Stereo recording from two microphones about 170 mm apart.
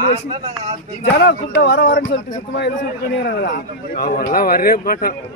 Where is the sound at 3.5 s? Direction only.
60° left (ahead or behind).